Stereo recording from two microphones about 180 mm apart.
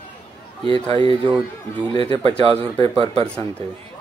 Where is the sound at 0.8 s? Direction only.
30° right (ahead or behind).